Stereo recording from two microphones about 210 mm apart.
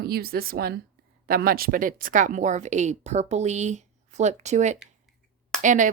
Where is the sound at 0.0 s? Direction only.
45° right (ahead or behind).